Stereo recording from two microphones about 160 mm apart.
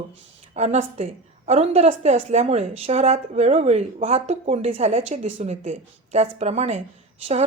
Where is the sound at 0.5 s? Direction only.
45° right (ahead or behind).